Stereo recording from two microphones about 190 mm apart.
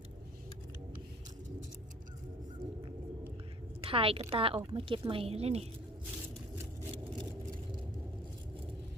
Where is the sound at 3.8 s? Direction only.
30° right (ahead or behind).